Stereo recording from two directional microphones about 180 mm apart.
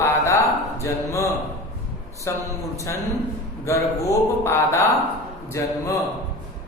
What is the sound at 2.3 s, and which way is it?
Speech, 15° left (ahead or behind).